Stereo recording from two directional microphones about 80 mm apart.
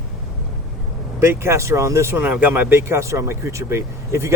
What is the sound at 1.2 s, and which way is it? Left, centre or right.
Speech, right.